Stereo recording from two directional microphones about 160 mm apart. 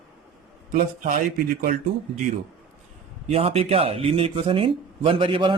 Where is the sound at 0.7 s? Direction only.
60° right (ahead or behind).